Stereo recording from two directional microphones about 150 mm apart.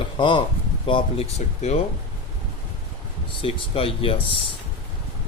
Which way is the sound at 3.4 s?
40° left (ahead or behind).